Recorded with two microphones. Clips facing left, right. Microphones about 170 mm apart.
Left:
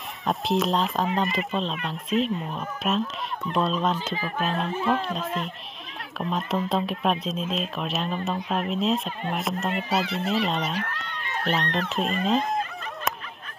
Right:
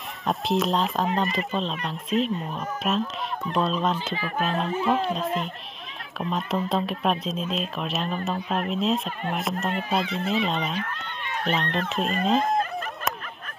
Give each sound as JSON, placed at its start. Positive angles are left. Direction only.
{"t": 0.3, "sound": "speech", "side_deg": 0}
{"t": 10.8, "sound": "speech", "side_deg": 70}
{"t": 11.4, "sound": "speech", "side_deg": 0}